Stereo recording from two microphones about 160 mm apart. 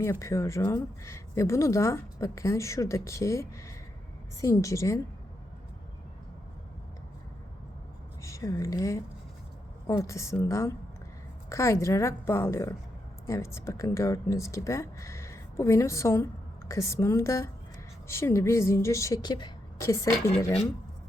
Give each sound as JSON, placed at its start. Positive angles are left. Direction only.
{"t": 0.0, "sound": "speech", "side_deg": 20}
{"t": 8.2, "sound": "a woman's voice", "side_deg": 20}